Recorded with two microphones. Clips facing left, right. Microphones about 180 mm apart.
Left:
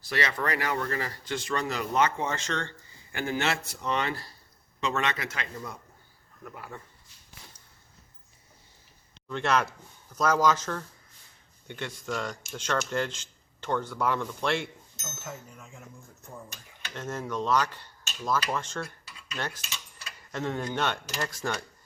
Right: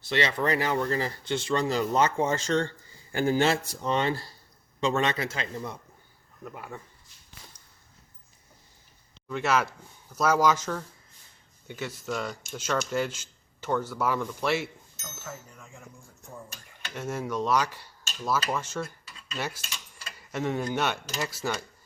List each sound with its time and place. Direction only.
0.1 s a man's voice: 25° right (ahead or behind)
9.3 s speech: 5° right (ahead or behind)
15.2 s speech: 10° left (ahead or behind)
16.9 s speech: 10° right (ahead or behind)